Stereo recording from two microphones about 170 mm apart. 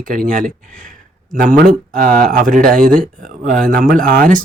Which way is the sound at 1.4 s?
55° right (ahead or behind).